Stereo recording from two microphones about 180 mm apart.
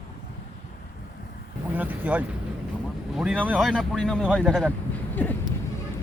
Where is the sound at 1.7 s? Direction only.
10° right (ahead or behind).